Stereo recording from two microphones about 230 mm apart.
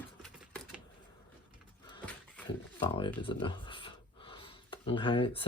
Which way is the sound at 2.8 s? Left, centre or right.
Left.